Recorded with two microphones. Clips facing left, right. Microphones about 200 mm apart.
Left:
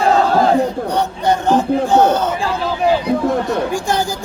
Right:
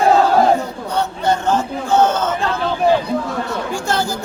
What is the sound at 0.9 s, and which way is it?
Speech, 15° left (ahead or behind).